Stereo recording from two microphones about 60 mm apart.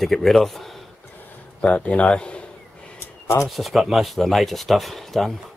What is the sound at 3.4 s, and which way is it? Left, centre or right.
Speech, centre.